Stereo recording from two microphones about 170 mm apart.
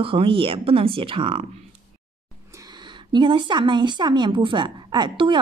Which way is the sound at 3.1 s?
25° right (ahead or behind).